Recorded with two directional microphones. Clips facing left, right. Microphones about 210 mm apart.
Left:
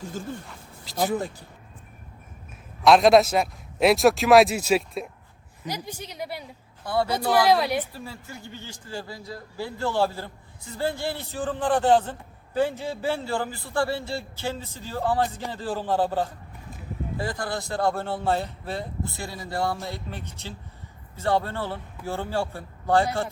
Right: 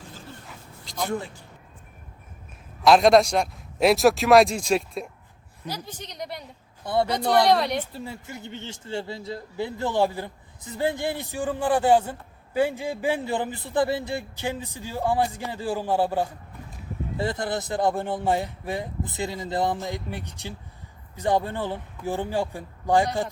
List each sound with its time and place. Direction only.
0.0 s a sound: 45° left (ahead or behind)
0.9 s a man's voice: 5° left (ahead or behind)
2.8 s a man's voice: centre (ahead or behind)
5.6 s a woman's voice: 15° left (ahead or behind)
6.8 s speech: 20° right (ahead or behind)
7.3 s a man's voice: 5° left (ahead or behind)
7.9 s a man's voice: 20° right (ahead or behind)
17.2 s a man's voice: 20° right (ahead or behind)